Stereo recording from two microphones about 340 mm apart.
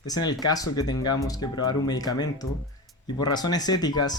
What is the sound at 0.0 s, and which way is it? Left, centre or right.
Speech, centre.